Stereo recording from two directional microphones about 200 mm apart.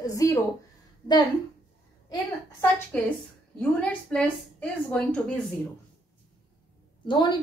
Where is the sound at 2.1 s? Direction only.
15° left (ahead or behind).